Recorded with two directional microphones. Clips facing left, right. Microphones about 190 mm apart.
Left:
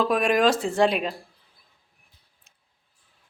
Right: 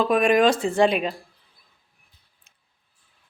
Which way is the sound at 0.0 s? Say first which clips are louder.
Right 3 dB; centre (ahead or behind).